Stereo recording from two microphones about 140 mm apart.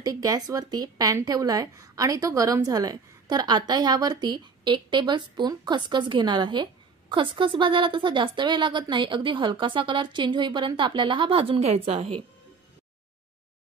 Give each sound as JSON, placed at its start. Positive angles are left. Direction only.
{"t": 0.0, "sound": "a woman's voice", "side_deg": -25}